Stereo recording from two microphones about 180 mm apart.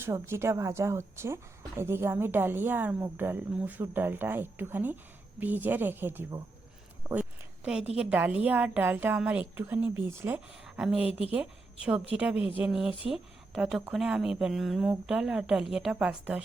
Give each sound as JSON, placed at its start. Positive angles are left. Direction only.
{"t": 0.0, "sound": "a woman's voice", "side_deg": -15}
{"t": 7.1, "sound": "a sound", "side_deg": -5}
{"t": 7.9, "sound": "a woman's voice", "side_deg": -5}